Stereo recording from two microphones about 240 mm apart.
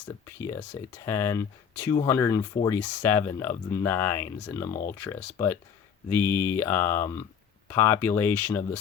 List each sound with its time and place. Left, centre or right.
0.0 s speech: centre